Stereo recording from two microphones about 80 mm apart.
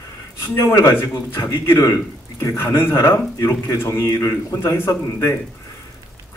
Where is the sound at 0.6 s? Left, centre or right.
Left.